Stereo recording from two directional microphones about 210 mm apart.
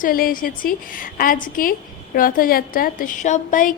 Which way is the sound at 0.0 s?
45° left (ahead or behind).